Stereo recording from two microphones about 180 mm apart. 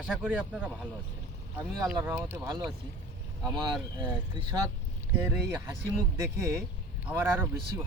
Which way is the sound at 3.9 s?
25° right (ahead or behind).